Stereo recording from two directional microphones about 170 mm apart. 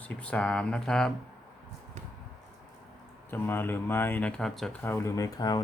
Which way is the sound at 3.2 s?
10° left (ahead or behind).